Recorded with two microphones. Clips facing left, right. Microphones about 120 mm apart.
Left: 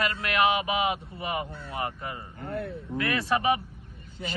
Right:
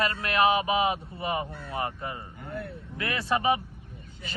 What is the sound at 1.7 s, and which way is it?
A man's voice, 30° right (ahead or behind).